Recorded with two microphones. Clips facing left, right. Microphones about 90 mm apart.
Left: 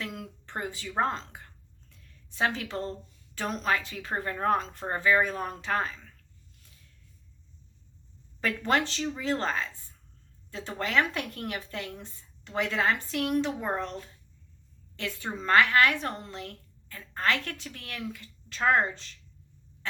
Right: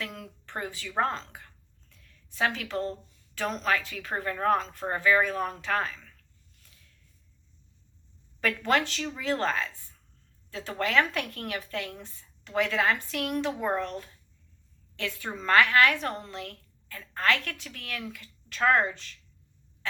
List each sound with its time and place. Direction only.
0.1 s a woman's voice: 20° left (ahead or behind)
8.4 s speech: 25° left (ahead or behind)
14.9 s a woman's voice: 30° left (ahead or behind)